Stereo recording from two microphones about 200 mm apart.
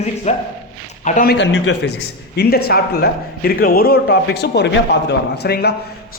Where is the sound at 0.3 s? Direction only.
35° left (ahead or behind).